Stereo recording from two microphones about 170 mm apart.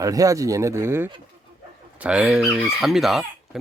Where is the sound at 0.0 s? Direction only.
20° right (ahead or behind).